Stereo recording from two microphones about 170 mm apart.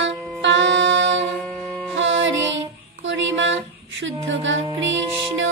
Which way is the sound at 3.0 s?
90° right.